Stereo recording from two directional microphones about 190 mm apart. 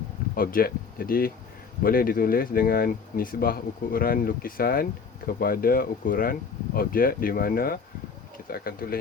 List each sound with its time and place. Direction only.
0.3 s speech: 50° left (ahead or behind)